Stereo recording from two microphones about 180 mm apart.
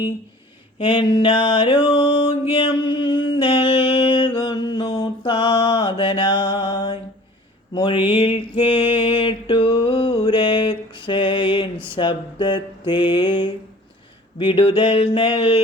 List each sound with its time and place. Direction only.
0.8 s mantra: 30° left (ahead or behind)
2.6 s music: 30° left (ahead or behind)
7.7 s mantra: 25° left (ahead or behind)